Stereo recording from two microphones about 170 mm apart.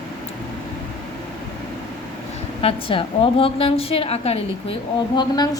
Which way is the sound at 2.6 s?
35° left (ahead or behind).